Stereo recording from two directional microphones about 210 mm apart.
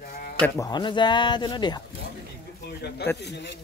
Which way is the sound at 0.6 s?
20° left (ahead or behind).